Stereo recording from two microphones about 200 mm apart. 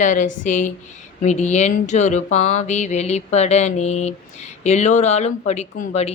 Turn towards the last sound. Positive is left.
turn(degrees=35)  # may be behind; listen again after turning